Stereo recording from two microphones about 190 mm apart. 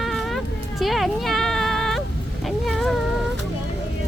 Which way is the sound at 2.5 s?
Centre (ahead or behind).